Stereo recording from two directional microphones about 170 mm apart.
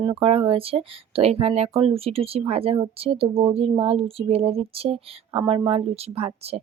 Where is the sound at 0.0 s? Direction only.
35° right (ahead or behind).